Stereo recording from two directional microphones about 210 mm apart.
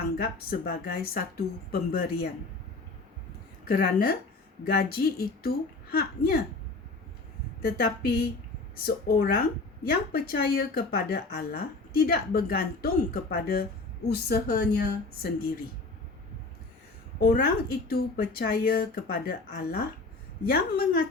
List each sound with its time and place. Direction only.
0.2 s speech: 45° left (ahead or behind)
3.7 s speech: 45° left (ahead or behind)
7.6 s speech: 45° left (ahead or behind)
17.2 s speech: 45° left (ahead or behind)